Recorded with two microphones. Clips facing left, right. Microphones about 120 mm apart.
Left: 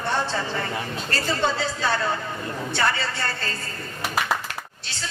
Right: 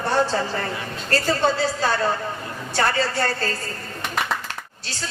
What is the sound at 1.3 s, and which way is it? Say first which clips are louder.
A man's voice: right 3 dB; 40° right (ahead or behind).